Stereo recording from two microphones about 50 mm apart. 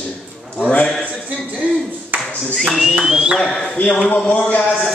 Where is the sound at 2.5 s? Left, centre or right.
Centre.